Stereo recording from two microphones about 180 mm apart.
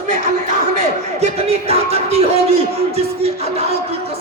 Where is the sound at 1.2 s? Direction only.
35° right (ahead or behind).